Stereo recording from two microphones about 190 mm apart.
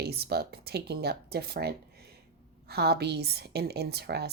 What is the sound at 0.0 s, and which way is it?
Speech, 55° right (ahead or behind).